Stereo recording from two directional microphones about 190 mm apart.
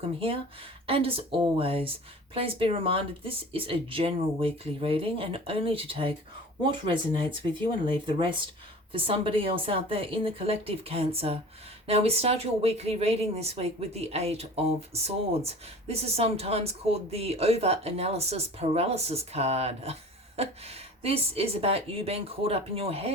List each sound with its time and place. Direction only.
0.9 s speech: 30° right (ahead or behind)